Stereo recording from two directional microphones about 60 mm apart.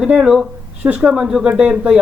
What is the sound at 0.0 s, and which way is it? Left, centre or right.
Speech, centre.